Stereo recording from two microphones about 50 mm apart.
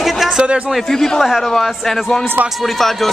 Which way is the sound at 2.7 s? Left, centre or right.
Centre.